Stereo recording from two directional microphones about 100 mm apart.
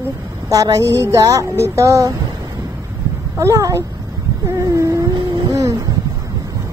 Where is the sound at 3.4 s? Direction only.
35° right (ahead or behind).